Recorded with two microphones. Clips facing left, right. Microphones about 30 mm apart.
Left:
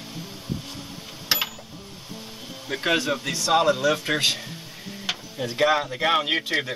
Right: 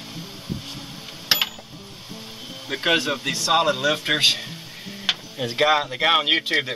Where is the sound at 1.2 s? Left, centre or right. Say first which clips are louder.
Right 3 dB; right.